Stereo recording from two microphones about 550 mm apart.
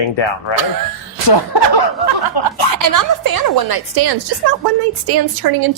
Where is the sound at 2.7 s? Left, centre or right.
Right.